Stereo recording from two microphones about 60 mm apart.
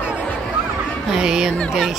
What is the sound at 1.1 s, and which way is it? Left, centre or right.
Speech, centre.